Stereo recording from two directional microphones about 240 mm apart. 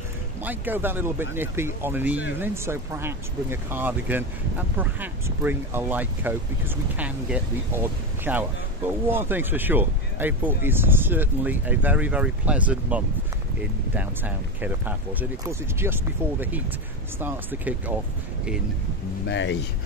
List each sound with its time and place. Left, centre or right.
0.4 s speech: centre
19.2 s speech: left